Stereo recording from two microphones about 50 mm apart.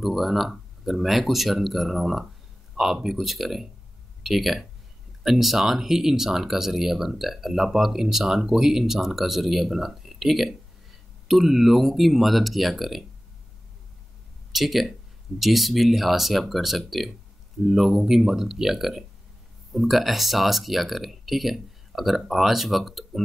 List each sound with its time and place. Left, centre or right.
0.0 s speech: centre
14.5 s speech: centre